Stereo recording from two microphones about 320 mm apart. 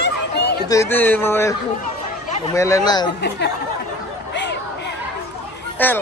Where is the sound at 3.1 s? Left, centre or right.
Left.